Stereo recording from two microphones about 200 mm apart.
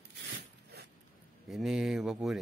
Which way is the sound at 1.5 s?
Centre (ahead or behind).